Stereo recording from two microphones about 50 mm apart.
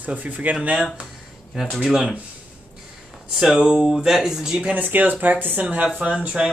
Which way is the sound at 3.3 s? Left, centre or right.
Centre.